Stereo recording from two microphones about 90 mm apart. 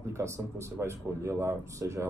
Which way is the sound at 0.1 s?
30° right (ahead or behind).